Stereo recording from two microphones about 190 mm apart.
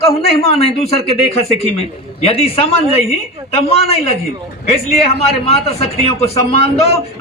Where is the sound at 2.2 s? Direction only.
30° left (ahead or behind).